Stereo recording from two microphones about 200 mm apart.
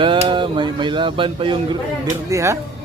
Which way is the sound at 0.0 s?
25° right (ahead or behind).